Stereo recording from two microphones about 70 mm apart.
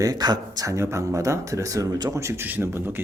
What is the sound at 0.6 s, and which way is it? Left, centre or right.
Speech, right.